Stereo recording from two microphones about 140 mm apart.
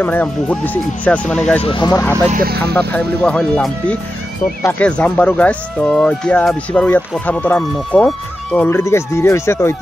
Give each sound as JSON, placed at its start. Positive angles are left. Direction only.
{"t": 0.0, "sound": "speech", "side_deg": 15}
{"t": 1.6, "sound": "speech", "side_deg": 40}
{"t": 1.9, "sound": "speech", "side_deg": 15}
{"t": 8.6, "sound": "speech", "side_deg": 20}